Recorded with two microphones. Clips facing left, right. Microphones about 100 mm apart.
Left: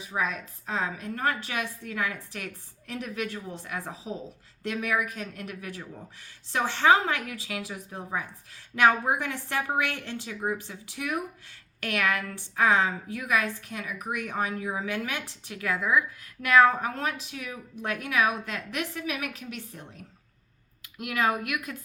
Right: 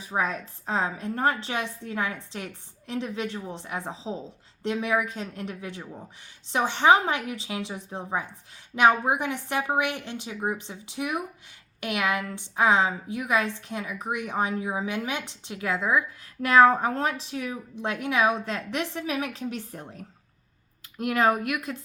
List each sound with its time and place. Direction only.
0.0 s a woman's voice: 35° right (ahead or behind)